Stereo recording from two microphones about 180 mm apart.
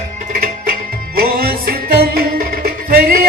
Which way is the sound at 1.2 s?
55° right (ahead or behind).